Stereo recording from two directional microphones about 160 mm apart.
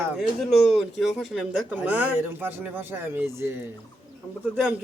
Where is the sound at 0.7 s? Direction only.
Centre (ahead or behind); by 3.7 s 15° right (ahead or behind).